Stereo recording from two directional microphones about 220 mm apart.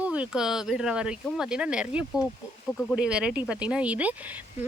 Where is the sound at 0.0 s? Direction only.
5° right (ahead or behind).